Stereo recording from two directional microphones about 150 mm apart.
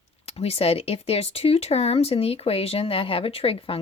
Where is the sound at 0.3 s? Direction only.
45° left (ahead or behind).